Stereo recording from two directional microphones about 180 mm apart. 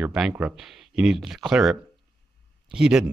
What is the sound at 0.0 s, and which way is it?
Speech, 5° right (ahead or behind).